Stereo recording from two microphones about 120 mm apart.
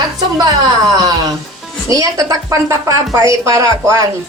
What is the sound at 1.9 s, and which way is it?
A woman's voice, 30° right (ahead or behind).